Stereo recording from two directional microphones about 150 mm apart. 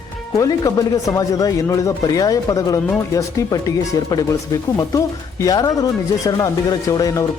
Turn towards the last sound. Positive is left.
turn(degrees=25)  # may be behind; listen again after turning